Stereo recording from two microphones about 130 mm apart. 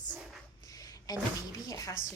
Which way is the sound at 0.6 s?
25° left (ahead or behind).